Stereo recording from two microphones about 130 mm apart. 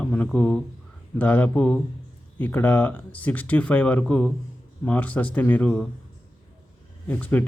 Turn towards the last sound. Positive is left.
turn(degrees=10)  # may be behind; listen again after turning